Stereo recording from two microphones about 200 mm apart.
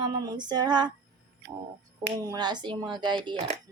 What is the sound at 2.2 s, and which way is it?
Speech, 20° right (ahead or behind).